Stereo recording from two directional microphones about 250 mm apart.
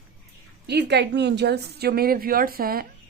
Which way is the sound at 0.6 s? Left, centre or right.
Right.